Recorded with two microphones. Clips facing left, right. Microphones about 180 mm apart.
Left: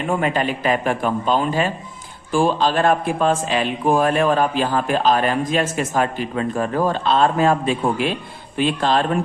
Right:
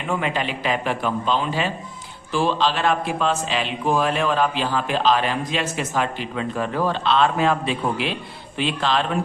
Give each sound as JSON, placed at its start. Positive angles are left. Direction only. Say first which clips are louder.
{"t": 0.1, "sound": "a man's voice", "louder": "left 3 dB", "side_deg": 45}